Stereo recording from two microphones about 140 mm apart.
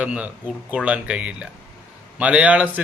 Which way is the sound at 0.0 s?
10° right (ahead or behind).